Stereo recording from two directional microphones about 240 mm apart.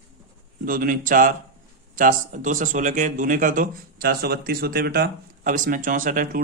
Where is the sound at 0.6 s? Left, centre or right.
Right.